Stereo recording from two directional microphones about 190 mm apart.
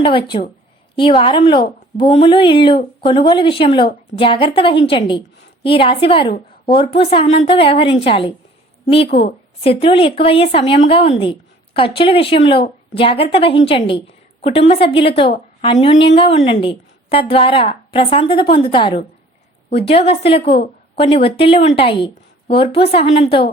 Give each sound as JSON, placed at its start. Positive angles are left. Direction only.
{"t": 0.0, "sound": "a woman's voice", "side_deg": 25}